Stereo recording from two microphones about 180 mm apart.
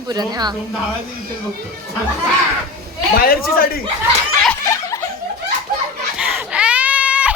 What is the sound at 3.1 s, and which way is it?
Speech, 55° left (ahead or behind).